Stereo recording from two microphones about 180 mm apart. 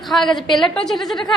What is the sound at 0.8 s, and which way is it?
Speech, centre (ahead or behind).